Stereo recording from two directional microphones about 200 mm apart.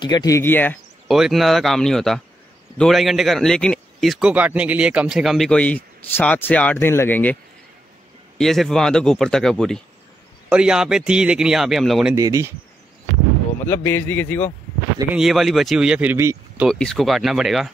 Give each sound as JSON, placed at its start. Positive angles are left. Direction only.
{"t": 0.0, "sound": "speech", "side_deg": 20}
{"t": 1.1, "sound": "a man's voice", "side_deg": 0}
{"t": 8.4, "sound": "a man's voice", "side_deg": 0}
{"t": 12.2, "sound": "speech", "side_deg": -15}
{"t": 13.7, "sound": "a man's voice", "side_deg": 10}
{"t": 15.1, "sound": "a man's voice", "side_deg": 0}
{"t": 16.6, "sound": "a man's voice", "side_deg": 5}